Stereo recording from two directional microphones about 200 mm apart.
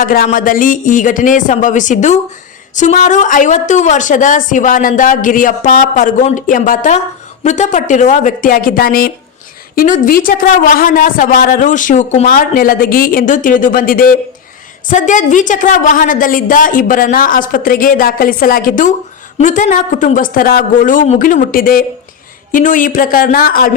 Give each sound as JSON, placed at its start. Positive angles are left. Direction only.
{"t": 0.0, "sound": "a woman's voice", "side_deg": 45}